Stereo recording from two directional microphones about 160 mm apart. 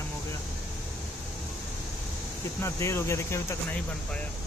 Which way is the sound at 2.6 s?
15° left (ahead or behind).